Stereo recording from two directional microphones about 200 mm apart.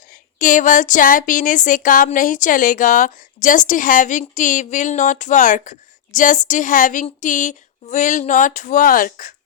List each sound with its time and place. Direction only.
0.3 s speech: 40° left (ahead or behind)